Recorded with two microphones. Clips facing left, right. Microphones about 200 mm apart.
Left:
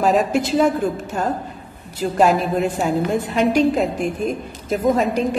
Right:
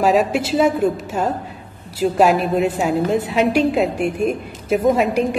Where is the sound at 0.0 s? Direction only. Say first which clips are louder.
Right 1 dB; centre (ahead or behind).